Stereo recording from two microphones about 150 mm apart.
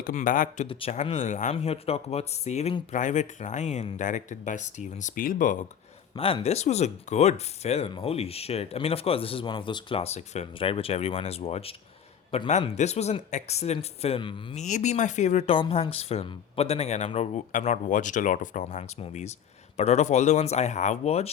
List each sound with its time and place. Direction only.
0.0 s speech: 60° left (ahead or behind)
0.7 s speech: 40° left (ahead or behind); by 5.6 s 60° left (ahead or behind)
6.1 s speech: 40° left (ahead or behind)
14.5 s speech: 50° left (ahead or behind)